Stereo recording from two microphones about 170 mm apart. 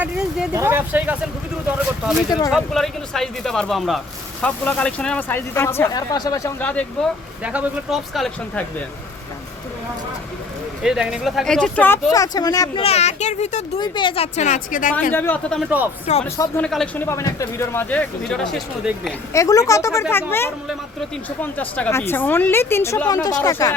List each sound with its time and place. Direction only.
0.0 s speech: 5° right (ahead or behind)
2.5 s speech: centre (ahead or behind); by 6.5 s 20° left (ahead or behind)
6.6 s speech: 10° left (ahead or behind)
7.4 s speech: 5° right (ahead or behind)
10.8 s speech: centre (ahead or behind)
12.1 s speech: 20° left (ahead or behind)
12.8 s speech: 40° left (ahead or behind)
13.7 s speech: 25° left (ahead or behind); by 14.9 s 50° left (ahead or behind)
15.1 s speech: 10° left (ahead or behind)
19.3 s speech: 20° left (ahead or behind)